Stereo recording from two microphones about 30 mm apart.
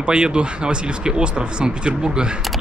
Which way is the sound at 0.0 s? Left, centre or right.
Right.